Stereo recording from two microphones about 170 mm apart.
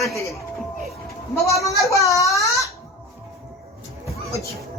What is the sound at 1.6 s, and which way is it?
Speech, 20° left (ahead or behind).